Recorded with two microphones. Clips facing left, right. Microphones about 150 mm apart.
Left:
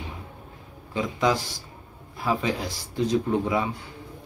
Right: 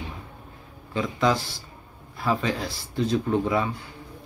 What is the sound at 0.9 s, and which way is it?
A man's voice, 15° left (ahead or behind).